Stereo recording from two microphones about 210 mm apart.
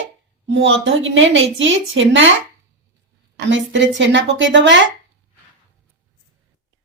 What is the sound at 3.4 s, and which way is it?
A woman's voice, 60° right (ahead or behind).